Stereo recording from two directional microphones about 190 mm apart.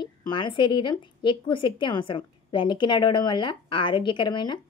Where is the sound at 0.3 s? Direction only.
25° left (ahead or behind).